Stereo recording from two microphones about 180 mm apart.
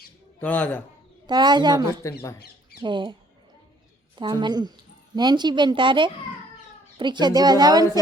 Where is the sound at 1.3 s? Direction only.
25° right (ahead or behind).